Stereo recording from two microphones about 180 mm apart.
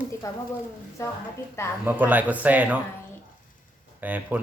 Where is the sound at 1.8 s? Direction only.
10° right (ahead or behind).